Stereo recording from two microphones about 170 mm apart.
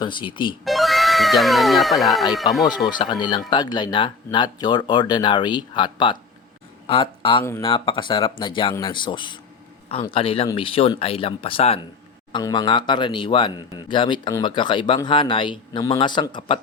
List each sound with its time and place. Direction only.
0.0 s speech: 30° left (ahead or behind)
0.6 s speech: centre (ahead or behind)
2.6 s speech: 25° left (ahead or behind)